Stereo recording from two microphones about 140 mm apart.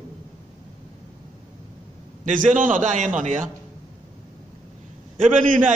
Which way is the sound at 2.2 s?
70° right (ahead or behind).